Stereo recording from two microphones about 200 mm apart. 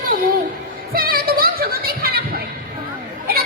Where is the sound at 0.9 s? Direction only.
50° right (ahead or behind).